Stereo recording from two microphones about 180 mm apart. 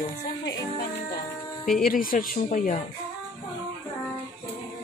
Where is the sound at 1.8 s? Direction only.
50° left (ahead or behind).